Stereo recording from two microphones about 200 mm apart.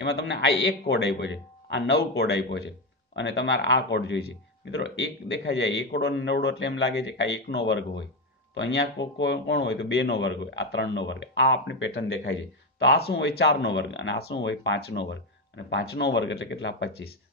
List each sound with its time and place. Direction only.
0.0 s speech: 55° left (ahead or behind)